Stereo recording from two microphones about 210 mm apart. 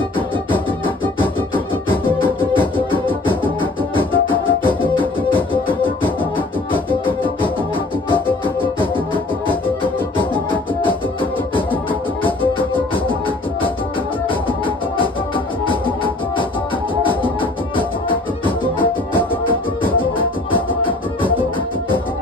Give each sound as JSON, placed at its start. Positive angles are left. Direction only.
{"t": 3.4, "sound": "music", "side_deg": 25}
{"t": 8.5, "sound": "music", "side_deg": 25}
{"t": 15.0, "sound": "music", "side_deg": 25}
{"t": 19.8, "sound": "music", "side_deg": 25}